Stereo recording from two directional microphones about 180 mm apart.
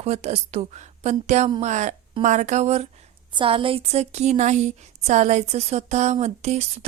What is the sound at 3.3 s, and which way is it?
A woman's voice, 30° right (ahead or behind).